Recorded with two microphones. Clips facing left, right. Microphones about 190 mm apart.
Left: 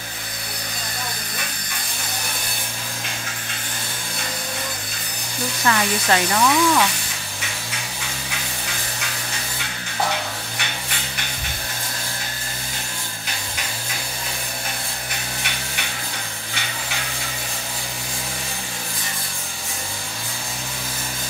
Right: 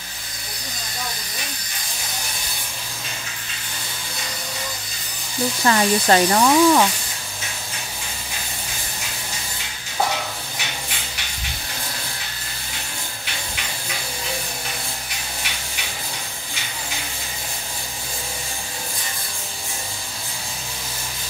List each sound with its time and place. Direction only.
5.7 s speech: 35° right (ahead or behind)